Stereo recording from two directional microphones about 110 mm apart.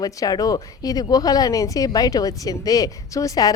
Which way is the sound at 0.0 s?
35° left (ahead or behind).